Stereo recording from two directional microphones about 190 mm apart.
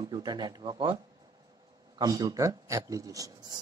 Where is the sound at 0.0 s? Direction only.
20° right (ahead or behind).